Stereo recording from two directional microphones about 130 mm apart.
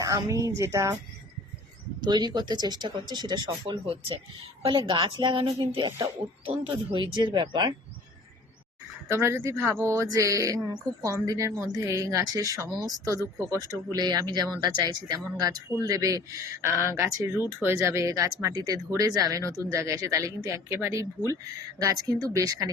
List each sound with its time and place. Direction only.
0.0 s speech: 25° right (ahead or behind)
2.0 s speech: 35° right (ahead or behind)
9.0 s speech: 20° right (ahead or behind)